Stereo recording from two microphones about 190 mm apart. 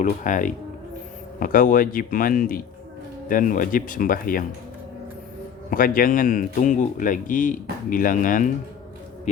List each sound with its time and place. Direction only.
0.0 s speech: 40° left (ahead or behind)
5.7 s speech: 45° left (ahead or behind)